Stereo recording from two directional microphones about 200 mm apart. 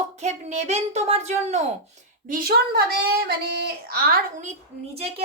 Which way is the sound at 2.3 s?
50° right (ahead or behind).